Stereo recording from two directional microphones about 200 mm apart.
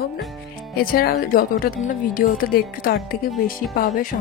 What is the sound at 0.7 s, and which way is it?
Speech, 50° left (ahead or behind).